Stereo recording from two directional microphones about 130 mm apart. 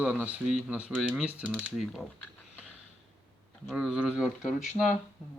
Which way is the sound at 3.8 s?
5° right (ahead or behind).